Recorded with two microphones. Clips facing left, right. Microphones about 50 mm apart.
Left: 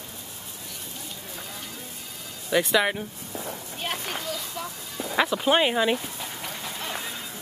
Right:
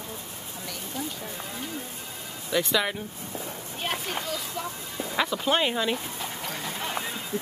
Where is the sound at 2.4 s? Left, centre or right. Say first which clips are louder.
Left 3 dB; centre.